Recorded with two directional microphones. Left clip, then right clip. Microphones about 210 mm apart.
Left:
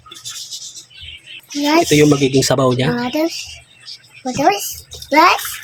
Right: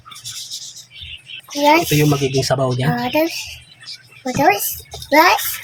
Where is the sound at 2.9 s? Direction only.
20° left (ahead or behind).